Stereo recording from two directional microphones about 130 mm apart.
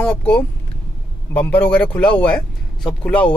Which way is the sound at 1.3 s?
15° left (ahead or behind).